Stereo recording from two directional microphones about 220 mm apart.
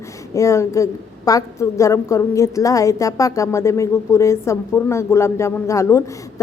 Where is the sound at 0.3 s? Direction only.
15° left (ahead or behind).